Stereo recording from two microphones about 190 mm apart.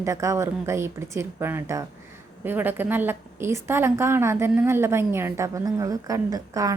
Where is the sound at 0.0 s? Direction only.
15° right (ahead or behind).